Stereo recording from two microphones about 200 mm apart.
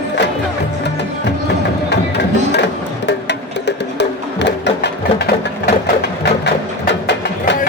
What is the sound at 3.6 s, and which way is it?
Music, 60° left (ahead or behind).